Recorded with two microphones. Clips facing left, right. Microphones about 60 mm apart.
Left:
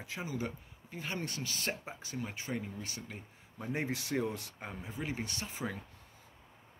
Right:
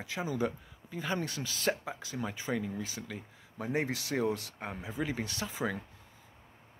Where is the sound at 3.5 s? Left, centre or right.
Right.